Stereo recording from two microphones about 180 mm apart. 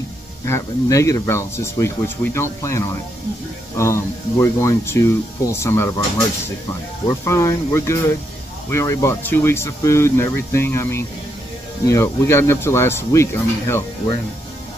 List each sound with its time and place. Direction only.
0.5 s speech: 15° left (ahead or behind)
7.1 s speech: 15° left (ahead or behind)